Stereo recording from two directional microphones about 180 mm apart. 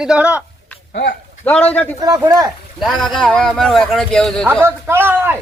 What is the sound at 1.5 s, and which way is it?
Speech, 10° left (ahead or behind).